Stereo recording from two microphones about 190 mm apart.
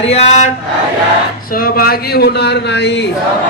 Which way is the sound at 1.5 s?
50° left (ahead or behind).